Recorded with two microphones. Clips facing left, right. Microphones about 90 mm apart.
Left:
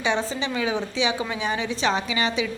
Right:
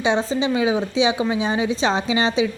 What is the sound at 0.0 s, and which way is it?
A woman's voice, 20° right (ahead or behind).